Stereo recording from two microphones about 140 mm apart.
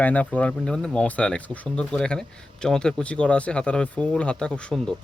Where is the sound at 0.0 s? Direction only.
10° left (ahead or behind).